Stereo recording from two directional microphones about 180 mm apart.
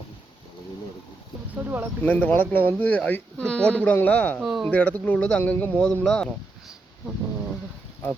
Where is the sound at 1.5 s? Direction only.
10° right (ahead or behind).